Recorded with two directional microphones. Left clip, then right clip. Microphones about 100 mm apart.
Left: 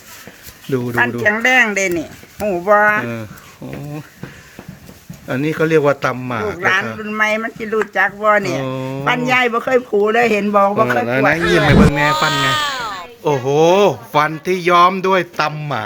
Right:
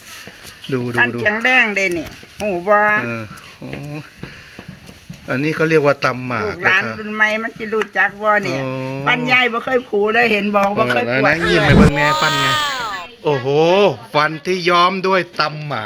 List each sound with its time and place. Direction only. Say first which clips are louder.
0.7 s a man's voice: left 2 dB; 15° left (ahead or behind)
0.9 s a man's voice: even; 30° left (ahead or behind); by 3.2 s 10° left (ahead or behind)
5.3 s a man's voice: even; 10° left (ahead or behind)
9.0 s speech: even; 35° left (ahead or behind)
11.3 s speech: even; centre (ahead or behind)
13.3 s speech: left 1 dB; 40° left (ahead or behind)
14.1 s speech: left 1 dB; 30° left (ahead or behind)
15.4 s a man's voice: left 2 dB; 60° left (ahead or behind)